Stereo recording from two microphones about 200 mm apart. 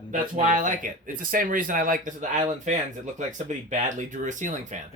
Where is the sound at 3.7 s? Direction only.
40° right (ahead or behind).